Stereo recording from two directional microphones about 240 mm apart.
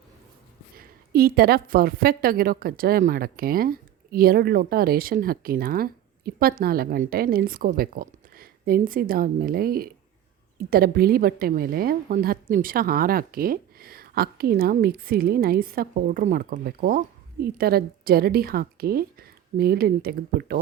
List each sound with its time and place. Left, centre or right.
0.8 s a woman's voice: right